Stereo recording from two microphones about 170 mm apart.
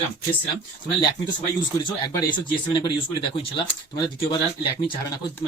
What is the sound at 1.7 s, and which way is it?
Speech, 20° left (ahead or behind).